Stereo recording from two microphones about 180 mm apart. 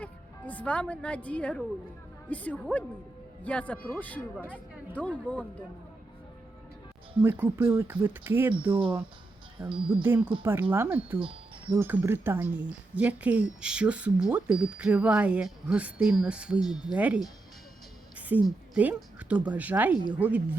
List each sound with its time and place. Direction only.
0.0 s speech: 10° left (ahead or behind)
7.2 s a woman's voice: 10° right (ahead or behind)
9.6 s speech: 25° right (ahead or behind)
10.0 s a woman's voice: 15° right (ahead or behind)